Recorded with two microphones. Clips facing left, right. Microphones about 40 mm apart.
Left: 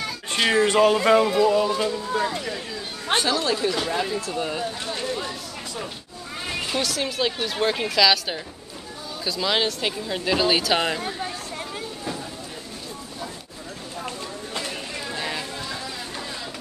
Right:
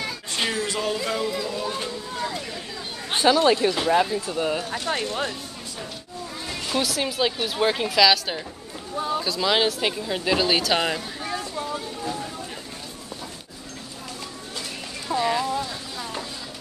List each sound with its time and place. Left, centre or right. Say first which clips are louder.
0.3 s speech: left 8 dB; left
3.2 s speech: right 6 dB; right; by 4.6 s centre
4.6 s speech: right 2 dB; right
6.8 s speech: right 2 dB; centre